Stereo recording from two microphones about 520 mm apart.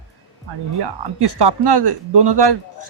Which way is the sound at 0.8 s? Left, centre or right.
Right.